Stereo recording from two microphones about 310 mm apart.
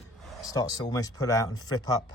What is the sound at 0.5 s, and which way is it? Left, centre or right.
Speech, centre.